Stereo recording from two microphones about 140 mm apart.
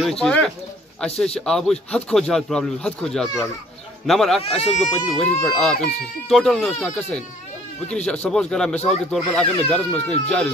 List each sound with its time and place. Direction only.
0.0 s speech: 5° left (ahead or behind)
4.4 s speech: 50° left (ahead or behind)
4.8 s speech: centre (ahead or behind)
7.9 s speech: 10° left (ahead or behind)